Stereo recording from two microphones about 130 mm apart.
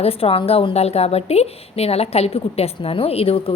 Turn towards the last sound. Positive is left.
turn(degrees=45)  # may be behind; listen again after turning